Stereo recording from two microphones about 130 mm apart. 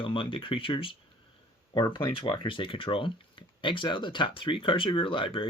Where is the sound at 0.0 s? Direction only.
40° left (ahead or behind).